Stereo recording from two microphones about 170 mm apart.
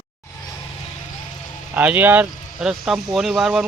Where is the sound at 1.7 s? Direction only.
10° right (ahead or behind).